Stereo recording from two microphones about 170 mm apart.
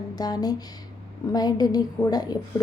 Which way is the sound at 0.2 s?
25° left (ahead or behind).